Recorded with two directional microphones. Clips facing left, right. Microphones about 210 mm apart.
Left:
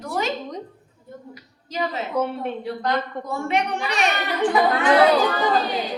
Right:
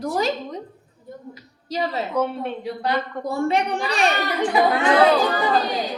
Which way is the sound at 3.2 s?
35° right (ahead or behind).